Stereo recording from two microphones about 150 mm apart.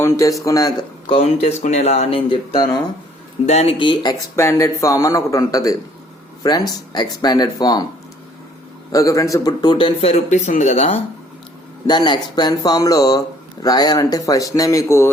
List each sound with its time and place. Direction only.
0.0 s speech: 20° left (ahead or behind)
1.0 s speech: 40° left (ahead or behind)
3.4 s a man's voice: 45° left (ahead or behind); by 4.2 s 30° left (ahead or behind)
4.4 s speech: 20° left (ahead or behind)
8.9 s a man's voice: 20° left (ahead or behind); by 11.0 s 45° left (ahead or behind)
11.9 s speech: 30° left (ahead or behind)